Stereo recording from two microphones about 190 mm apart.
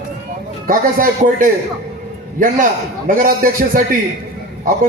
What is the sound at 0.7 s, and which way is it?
Speech, 45° right (ahead or behind).